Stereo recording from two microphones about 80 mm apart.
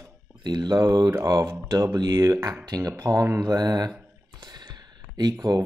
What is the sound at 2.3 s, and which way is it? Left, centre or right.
Speech, right.